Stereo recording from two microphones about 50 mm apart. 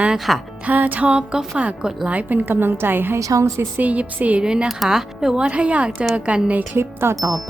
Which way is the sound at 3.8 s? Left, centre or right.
Right.